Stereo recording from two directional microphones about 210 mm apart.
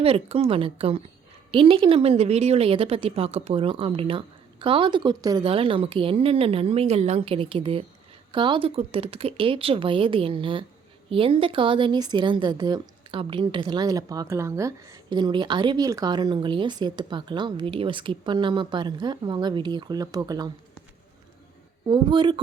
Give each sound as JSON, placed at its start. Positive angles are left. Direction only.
{"t": 0.0, "sound": "a woman's voice", "side_deg": -30}
{"t": 21.8, "sound": "a woman's voice", "side_deg": -25}